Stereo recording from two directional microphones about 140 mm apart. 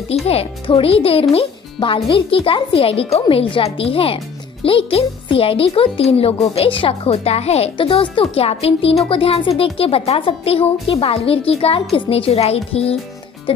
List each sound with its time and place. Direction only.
0.1 s a child's voice: 45° left (ahead or behind)